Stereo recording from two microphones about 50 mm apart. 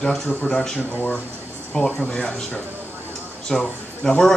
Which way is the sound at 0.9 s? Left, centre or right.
Left.